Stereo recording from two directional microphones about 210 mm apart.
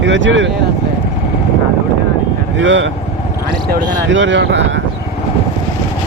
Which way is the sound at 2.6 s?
60° right (ahead or behind).